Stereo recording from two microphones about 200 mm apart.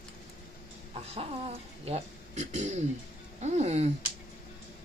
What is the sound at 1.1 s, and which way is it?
Speech, 30° right (ahead or behind).